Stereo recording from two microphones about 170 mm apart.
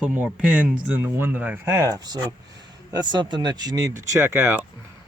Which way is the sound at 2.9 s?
25° right (ahead or behind).